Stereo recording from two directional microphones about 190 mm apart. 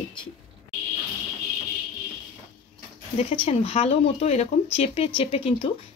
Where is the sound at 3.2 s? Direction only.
30° left (ahead or behind).